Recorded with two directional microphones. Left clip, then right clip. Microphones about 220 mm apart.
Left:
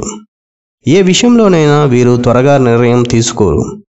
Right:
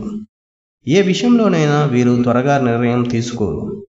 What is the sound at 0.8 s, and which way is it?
Speech, 50° left (ahead or behind).